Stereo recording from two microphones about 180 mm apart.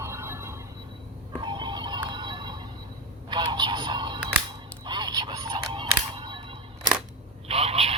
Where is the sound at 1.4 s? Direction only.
25° right (ahead or behind).